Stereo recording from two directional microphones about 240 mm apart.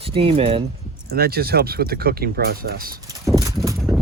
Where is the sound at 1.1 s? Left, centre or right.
Right.